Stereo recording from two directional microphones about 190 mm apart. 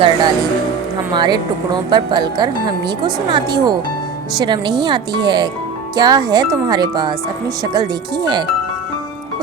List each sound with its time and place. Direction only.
0.0 s speech: 25° right (ahead or behind)